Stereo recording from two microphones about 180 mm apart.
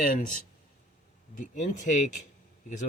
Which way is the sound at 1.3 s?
45° left (ahead or behind).